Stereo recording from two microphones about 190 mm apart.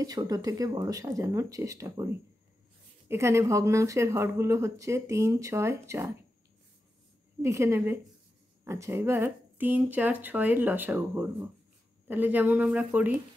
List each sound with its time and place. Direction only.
0.0 s speech: 20° right (ahead or behind)
3.1 s speech: 15° right (ahead or behind)
7.4 s speech: 15° right (ahead or behind)